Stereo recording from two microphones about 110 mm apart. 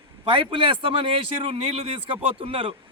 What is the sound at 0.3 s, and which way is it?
Speech, 50° right (ahead or behind).